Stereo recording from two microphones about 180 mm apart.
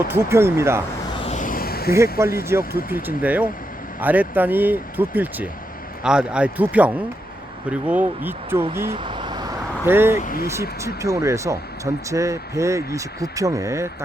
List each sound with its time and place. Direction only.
0.1 s speech: 15° right (ahead or behind)
1.2 s a sound: 40° left (ahead or behind); by 2.0 s 60° left (ahead or behind)
2.1 s speech: 15° right (ahead or behind)
9.0 s vehicle: 25° right (ahead or behind)
9.8 s speech: 10° right (ahead or behind)